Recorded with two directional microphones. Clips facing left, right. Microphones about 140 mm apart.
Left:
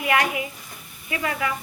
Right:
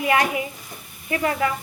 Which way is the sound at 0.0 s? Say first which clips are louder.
Right 2 dB; 30° right (ahead or behind).